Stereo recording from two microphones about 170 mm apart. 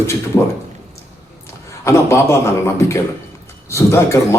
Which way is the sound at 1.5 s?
15° left (ahead or behind).